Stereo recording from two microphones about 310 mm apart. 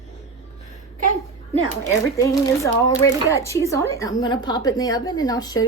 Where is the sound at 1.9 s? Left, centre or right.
Centre.